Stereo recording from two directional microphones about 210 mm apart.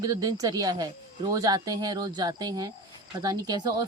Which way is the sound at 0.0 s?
20° right (ahead or behind).